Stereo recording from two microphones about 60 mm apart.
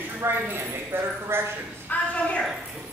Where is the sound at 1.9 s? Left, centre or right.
Left.